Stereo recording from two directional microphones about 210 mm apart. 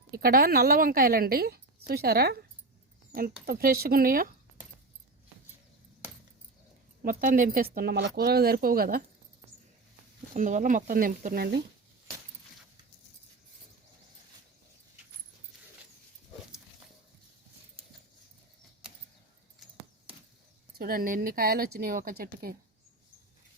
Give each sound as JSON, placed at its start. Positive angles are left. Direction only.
{"t": 0.2, "sound": "a woman's voice", "side_deg": -45}
{"t": 3.4, "sound": "a woman's voice", "side_deg": -45}
{"t": 7.0, "sound": "a woman's voice", "side_deg": -40}
{"t": 10.3, "sound": "speech", "side_deg": -40}
{"t": 20.7, "sound": "a woman's voice", "side_deg": -45}